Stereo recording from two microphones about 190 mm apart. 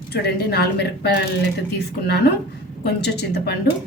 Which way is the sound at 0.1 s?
55° left (ahead or behind).